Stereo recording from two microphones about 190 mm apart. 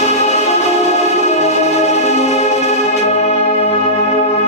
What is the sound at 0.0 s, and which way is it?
Music, 35° left (ahead or behind).